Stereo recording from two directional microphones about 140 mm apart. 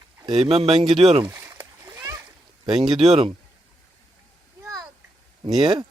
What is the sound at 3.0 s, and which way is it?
Speech, 50° right (ahead or behind).